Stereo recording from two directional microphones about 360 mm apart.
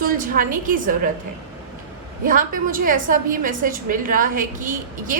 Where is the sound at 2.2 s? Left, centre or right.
Right.